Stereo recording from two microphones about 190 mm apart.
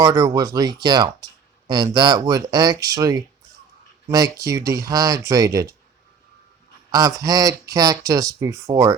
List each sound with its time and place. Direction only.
0.0 s speech: 20° right (ahead or behind)
6.9 s speech: 15° right (ahead or behind)